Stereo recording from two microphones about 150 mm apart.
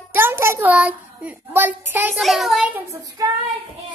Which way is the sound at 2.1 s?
Centre (ahead or behind).